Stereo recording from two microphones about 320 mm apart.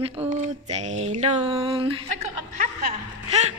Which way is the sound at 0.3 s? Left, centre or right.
Right.